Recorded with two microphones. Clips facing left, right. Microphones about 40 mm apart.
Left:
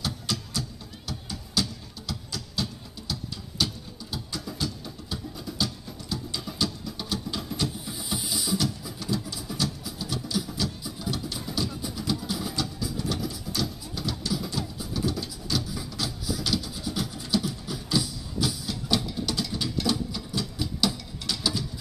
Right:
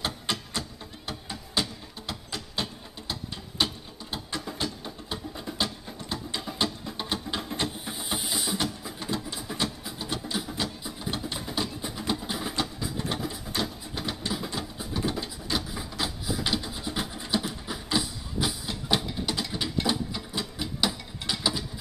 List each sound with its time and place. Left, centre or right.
0.0 s music: right